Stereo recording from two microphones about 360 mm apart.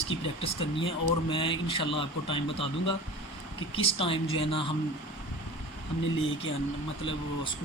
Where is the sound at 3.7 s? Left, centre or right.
Centre.